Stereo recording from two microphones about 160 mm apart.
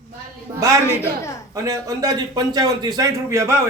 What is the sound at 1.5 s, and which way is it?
A man's voice, 20° right (ahead or behind).